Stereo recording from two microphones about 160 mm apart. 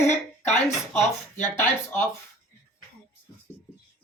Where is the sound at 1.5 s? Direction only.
15° left (ahead or behind).